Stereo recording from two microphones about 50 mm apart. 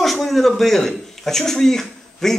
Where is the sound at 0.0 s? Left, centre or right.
Centre.